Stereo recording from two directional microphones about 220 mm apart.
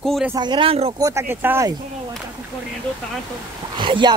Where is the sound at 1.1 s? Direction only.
10° right (ahead or behind).